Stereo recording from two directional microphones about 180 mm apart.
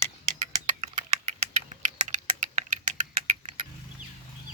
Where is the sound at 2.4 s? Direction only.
45° right (ahead or behind).